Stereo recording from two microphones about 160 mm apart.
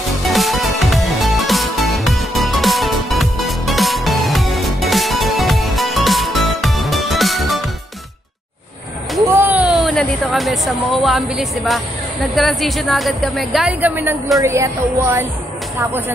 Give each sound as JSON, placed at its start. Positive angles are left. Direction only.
{"t": 0.3, "sound": "music", "side_deg": 0}
{"t": 9.3, "sound": "a sound", "side_deg": -10}
{"t": 12.4, "sound": "a woman's voice", "side_deg": 0}